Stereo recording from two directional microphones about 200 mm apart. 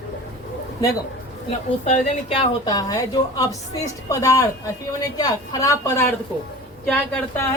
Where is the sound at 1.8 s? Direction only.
35° left (ahead or behind).